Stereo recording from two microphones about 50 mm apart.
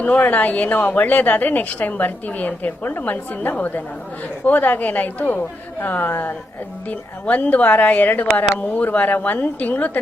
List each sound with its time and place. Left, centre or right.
0.0 s a woman's voice: left